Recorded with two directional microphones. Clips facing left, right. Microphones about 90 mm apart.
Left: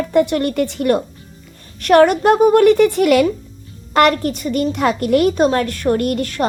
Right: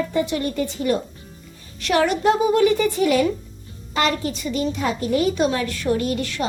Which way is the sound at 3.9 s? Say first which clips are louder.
Left 8 dB; 60° left (ahead or behind).